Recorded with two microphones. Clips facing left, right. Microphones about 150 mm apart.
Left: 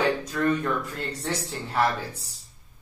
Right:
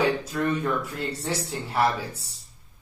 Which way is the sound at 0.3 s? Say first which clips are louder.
Left 1 dB; 10° right (ahead or behind).